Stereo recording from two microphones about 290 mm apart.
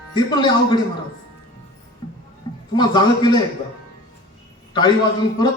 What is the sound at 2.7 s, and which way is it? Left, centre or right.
Speech, centre.